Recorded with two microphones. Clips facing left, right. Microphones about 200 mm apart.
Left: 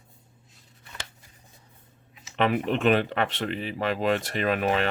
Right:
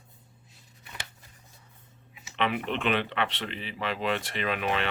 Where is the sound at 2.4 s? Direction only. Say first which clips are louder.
Left 5 dB; 45° left (ahead or behind).